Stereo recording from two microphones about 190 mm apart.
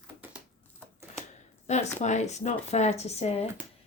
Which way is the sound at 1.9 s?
40° left (ahead or behind).